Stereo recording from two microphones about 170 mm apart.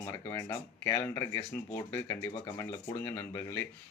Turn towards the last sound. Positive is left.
turn(degrees=15)  # may be behind; listen again after turning